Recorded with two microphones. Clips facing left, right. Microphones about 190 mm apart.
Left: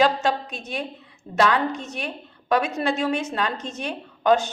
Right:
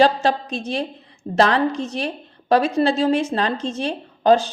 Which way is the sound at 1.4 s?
35° right (ahead or behind).